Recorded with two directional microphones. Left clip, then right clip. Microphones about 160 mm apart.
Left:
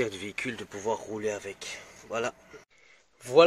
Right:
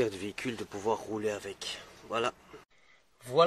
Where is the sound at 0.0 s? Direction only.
10° right (ahead or behind).